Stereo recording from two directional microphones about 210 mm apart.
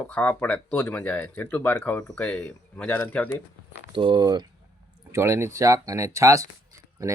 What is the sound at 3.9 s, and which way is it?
Speech, 25° right (ahead or behind).